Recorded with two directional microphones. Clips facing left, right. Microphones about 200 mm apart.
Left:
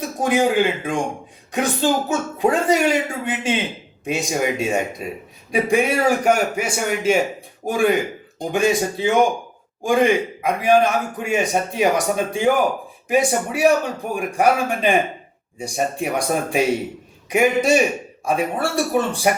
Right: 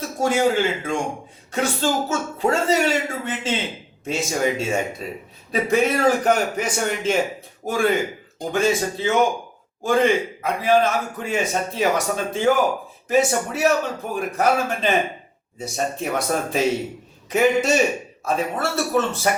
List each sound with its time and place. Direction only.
0.0 s a man's voice: 15° left (ahead or behind)